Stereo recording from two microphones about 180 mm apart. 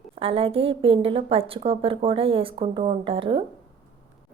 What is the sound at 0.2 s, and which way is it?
A woman's voice, 30° right (ahead or behind).